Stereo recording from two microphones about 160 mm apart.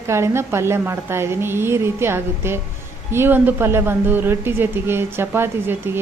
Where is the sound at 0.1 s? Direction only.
15° right (ahead or behind).